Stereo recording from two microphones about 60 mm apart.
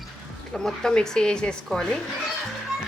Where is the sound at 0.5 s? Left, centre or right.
Centre.